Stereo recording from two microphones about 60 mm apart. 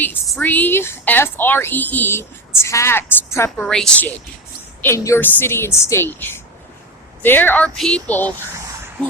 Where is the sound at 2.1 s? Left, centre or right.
Left.